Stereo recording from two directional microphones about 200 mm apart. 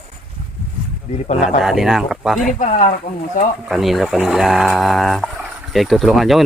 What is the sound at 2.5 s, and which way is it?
Speech, 40° left (ahead or behind).